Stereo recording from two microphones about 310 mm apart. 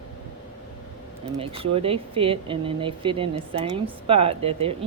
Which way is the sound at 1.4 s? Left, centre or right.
Centre.